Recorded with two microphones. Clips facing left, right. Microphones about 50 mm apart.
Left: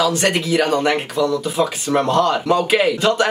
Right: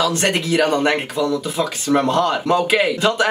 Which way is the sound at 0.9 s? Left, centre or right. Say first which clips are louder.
Left 1 dB; centre.